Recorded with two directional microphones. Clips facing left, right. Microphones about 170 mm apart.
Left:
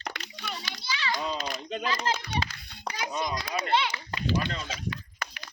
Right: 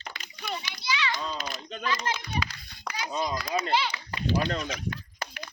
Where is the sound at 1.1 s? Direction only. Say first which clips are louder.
Left 2 dB; 25° left (ahead or behind).